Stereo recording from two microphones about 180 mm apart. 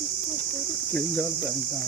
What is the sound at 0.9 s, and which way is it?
Speech, 5° left (ahead or behind).